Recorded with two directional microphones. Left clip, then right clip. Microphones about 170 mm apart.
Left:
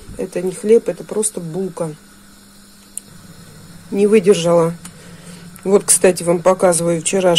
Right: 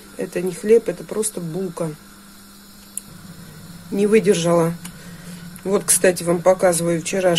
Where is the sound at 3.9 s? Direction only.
10° left (ahead or behind).